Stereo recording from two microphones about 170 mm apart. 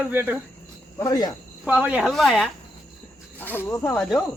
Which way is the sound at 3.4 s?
10° left (ahead or behind).